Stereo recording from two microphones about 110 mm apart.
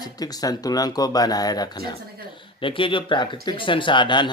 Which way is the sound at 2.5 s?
50° left (ahead or behind).